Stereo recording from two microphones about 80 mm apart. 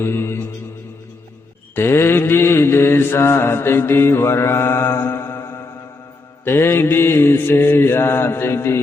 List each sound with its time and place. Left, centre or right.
0.0 s mantra: left
1.7 s mantra: left